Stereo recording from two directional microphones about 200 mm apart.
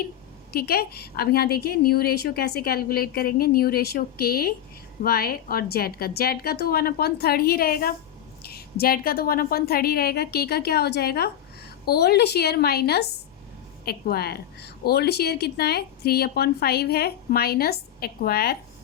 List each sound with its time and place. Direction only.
0.5 s a woman's voice: 50° left (ahead or behind)